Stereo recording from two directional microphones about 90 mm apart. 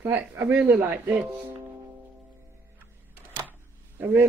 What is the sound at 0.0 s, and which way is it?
Speech, 25° right (ahead or behind).